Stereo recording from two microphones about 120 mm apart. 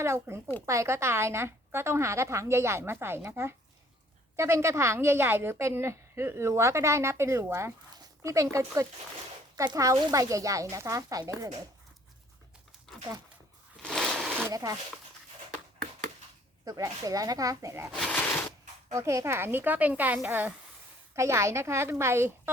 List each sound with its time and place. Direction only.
0.0 s a woman's voice: 20° right (ahead or behind)
13.8 s a sound: 5° left (ahead or behind)
14.5 s speech: 30° right (ahead or behind)
16.6 s a woman's voice: 30° right (ahead or behind)
17.9 s speech: 5° left (ahead or behind)
18.9 s a woman's voice: 25° right (ahead or behind)